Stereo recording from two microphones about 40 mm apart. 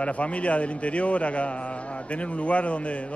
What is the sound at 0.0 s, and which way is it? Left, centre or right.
A man's voice, left.